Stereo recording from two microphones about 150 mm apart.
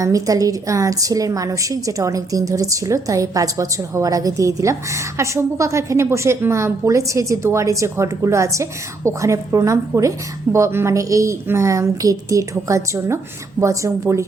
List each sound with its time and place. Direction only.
0.0 s a woman's voice: 25° right (ahead or behind)